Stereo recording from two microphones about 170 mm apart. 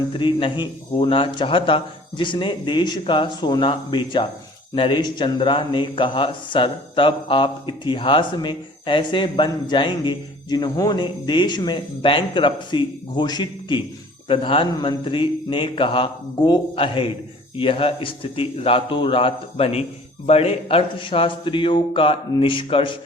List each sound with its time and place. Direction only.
0.2 s a man's voice: 30° left (ahead or behind)